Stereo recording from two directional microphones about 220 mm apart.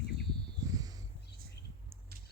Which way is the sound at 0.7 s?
15° right (ahead or behind).